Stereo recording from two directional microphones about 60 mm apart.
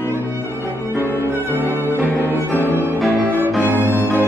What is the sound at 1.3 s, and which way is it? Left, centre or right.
Music, left.